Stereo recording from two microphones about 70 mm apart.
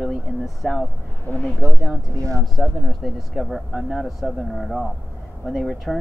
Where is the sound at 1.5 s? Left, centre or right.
Right.